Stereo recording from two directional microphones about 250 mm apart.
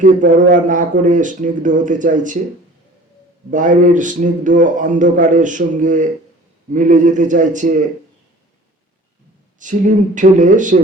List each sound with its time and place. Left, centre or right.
0.0 s speech: right
3.5 s speech: right
9.6 s speech: right